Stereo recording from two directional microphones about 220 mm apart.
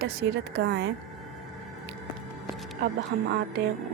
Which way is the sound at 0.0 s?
50° right (ahead or behind).